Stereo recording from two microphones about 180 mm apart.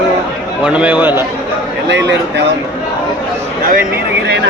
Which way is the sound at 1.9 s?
75° right (ahead or behind).